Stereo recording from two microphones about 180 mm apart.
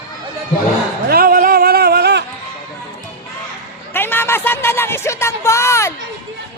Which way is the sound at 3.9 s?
10° left (ahead or behind).